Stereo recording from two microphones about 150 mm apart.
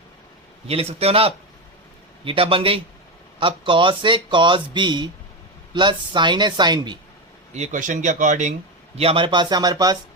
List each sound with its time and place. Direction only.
0.7 s speech: 40° right (ahead or behind)
7.5 s speech: 55° right (ahead or behind)
9.0 s speech: 40° right (ahead or behind)